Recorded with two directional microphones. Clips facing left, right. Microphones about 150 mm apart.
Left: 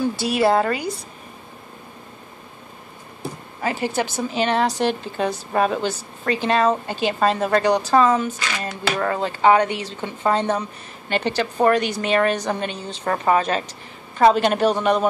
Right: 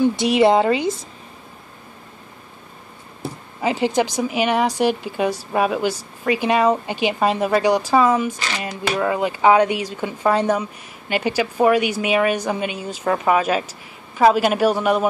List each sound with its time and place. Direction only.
0.2 s speech: 20° right (ahead or behind)
3.6 s speech: 15° right (ahead or behind)